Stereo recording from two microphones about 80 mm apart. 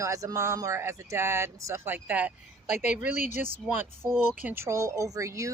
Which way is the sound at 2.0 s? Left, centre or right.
Centre.